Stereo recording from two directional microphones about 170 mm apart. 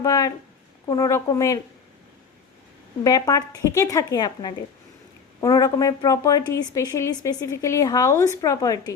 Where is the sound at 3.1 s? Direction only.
20° left (ahead or behind).